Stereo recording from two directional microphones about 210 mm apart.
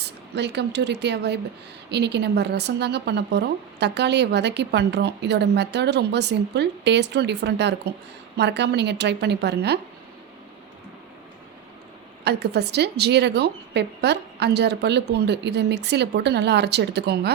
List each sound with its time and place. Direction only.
0.3 s speech: 55° right (ahead or behind)
12.2 s speech: 50° right (ahead or behind)